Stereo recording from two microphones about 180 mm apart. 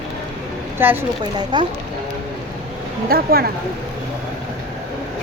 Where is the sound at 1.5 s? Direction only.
25° right (ahead or behind).